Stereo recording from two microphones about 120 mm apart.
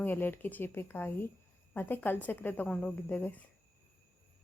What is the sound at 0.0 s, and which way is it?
A woman's voice, 15° left (ahead or behind).